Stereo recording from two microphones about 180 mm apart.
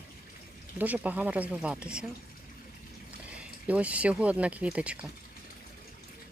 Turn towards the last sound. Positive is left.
turn(degrees=-5)  # may be behind; listen again after turning